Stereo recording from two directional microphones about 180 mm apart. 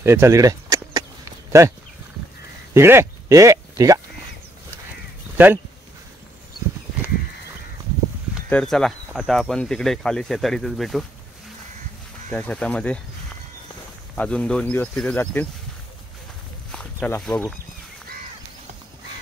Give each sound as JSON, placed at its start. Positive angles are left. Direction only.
{"t": 0.0, "sound": "a sound", "side_deg": -15}
{"t": 2.7, "sound": "speech", "side_deg": -15}
{"t": 5.4, "sound": "speech", "side_deg": -10}
{"t": 8.5, "sound": "speech", "side_deg": 5}
{"t": 12.3, "sound": "speech", "side_deg": 5}
{"t": 14.1, "sound": "speech", "side_deg": 5}
{"t": 16.7, "sound": "speech", "side_deg": 5}